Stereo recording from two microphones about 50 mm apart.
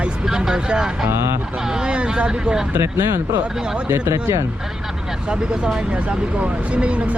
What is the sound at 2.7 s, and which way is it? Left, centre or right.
Speech, right.